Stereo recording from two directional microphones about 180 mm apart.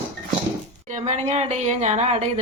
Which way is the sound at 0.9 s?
40° right (ahead or behind).